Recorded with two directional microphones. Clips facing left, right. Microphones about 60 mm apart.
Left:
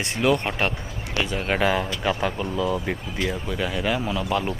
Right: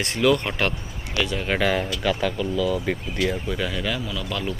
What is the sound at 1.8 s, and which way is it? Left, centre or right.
Speech, left.